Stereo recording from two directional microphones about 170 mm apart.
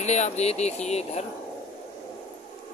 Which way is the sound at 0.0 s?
40° left (ahead or behind).